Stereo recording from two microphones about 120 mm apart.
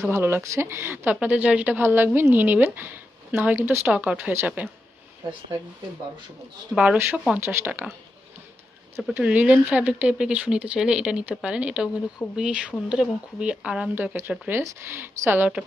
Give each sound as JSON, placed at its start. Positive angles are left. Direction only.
{"t": 0.0, "sound": "speech", "side_deg": -20}
{"t": 6.7, "sound": "speech", "side_deg": -10}
{"t": 7.3, "sound": "speech", "side_deg": -20}
{"t": 9.1, "sound": "speech", "side_deg": -10}
{"t": 14.6, "sound": "speech", "side_deg": -25}
{"t": 15.2, "sound": "speech", "side_deg": -15}